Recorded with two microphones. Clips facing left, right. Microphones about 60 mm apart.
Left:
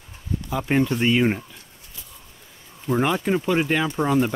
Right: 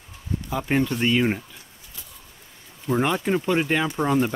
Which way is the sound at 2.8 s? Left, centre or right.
Centre.